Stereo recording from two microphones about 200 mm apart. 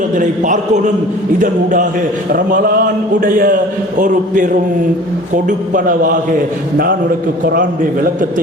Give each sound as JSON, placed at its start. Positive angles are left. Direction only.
{"t": 0.2, "sound": "a man's voice", "side_deg": -40}